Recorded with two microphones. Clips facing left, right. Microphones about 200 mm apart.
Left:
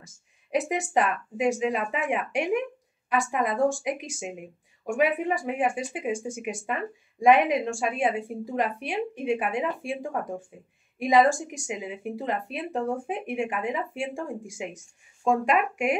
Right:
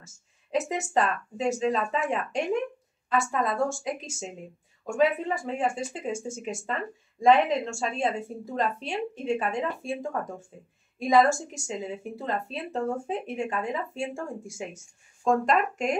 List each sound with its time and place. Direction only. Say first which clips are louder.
0.0 s a woman's voice: left 2 dB; 15° left (ahead or behind)